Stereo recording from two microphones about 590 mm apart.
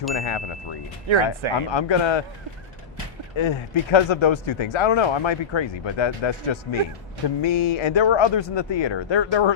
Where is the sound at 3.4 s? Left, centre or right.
Left.